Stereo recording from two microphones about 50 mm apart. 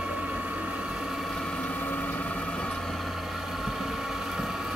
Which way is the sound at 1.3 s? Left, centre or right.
Centre.